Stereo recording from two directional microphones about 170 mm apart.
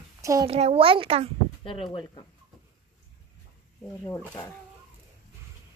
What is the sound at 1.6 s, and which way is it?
Speech, 30° left (ahead or behind).